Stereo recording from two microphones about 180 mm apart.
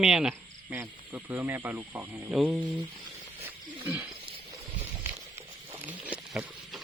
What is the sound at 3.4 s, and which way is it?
Wild animals, 15° right (ahead or behind).